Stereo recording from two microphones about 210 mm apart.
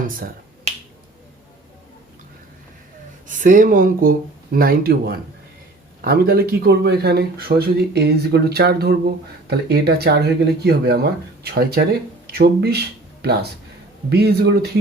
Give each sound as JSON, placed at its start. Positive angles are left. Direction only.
{"t": 0.1, "sound": "finger snapping", "side_deg": -40}
{"t": 3.2, "sound": "speech", "side_deg": -40}